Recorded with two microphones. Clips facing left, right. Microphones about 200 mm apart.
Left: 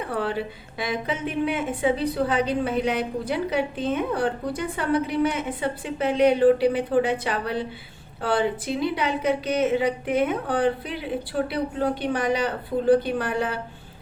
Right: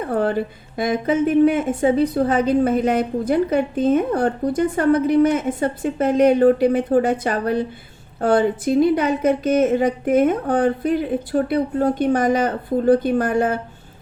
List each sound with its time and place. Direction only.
0.0 s a woman's voice: 45° right (ahead or behind)